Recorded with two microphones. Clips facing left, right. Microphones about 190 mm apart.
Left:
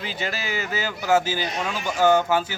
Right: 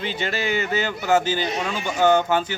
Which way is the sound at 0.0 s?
5° left (ahead or behind).